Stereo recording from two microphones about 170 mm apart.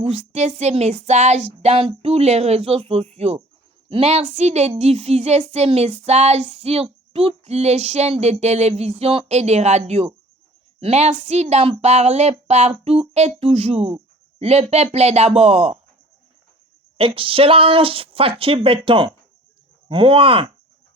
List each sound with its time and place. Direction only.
0.0 s speech: 40° right (ahead or behind)
17.0 s speech: 30° right (ahead or behind)